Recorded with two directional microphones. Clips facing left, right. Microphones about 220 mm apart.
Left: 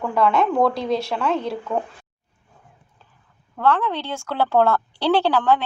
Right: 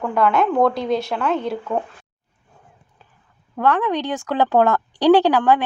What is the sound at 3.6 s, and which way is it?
A woman's voice, 15° right (ahead or behind).